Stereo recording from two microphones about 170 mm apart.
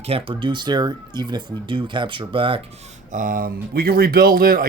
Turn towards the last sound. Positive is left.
turn(degrees=-55)  # may be behind; listen again after turning